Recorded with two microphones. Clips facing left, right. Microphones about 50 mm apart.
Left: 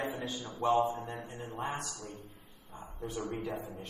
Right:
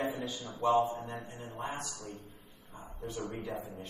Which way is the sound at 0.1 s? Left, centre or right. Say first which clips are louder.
Even; left.